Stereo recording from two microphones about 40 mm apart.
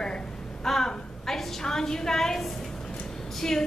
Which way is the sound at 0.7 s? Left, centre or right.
Centre.